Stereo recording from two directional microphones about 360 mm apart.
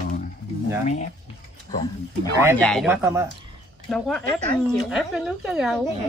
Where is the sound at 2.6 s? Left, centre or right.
Centre.